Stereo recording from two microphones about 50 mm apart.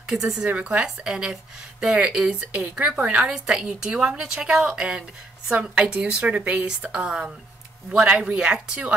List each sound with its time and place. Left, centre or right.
0.0 s speech: centre
0.5 s speech: right
0.8 s a woman's voice: centre
3.3 s a woman's voice: centre